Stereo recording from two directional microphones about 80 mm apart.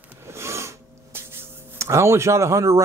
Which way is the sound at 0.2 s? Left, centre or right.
Right.